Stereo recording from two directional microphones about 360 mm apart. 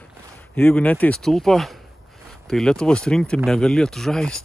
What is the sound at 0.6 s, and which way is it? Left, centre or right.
Speech, centre.